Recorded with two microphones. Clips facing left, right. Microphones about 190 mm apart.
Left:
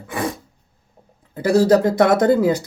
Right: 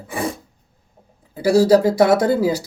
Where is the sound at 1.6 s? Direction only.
10° right (ahead or behind).